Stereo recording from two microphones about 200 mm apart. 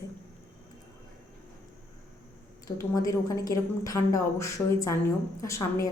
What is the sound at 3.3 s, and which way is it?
A woman's voice, 15° left (ahead or behind).